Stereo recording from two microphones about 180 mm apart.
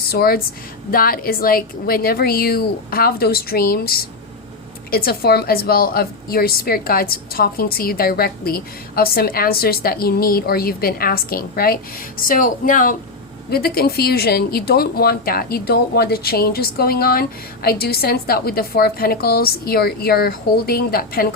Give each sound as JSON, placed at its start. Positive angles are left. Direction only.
{"t": 0.1, "sound": "a woman's voice", "side_deg": 60}
{"t": 13.5, "sound": "a woman's voice", "side_deg": 60}